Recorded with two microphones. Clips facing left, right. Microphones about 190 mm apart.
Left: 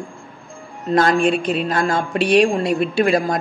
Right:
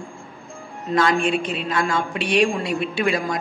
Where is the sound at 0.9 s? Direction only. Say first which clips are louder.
Left 4 dB; 40° left (ahead or behind).